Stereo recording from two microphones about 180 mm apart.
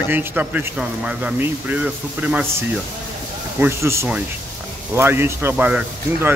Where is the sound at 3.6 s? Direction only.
15° right (ahead or behind).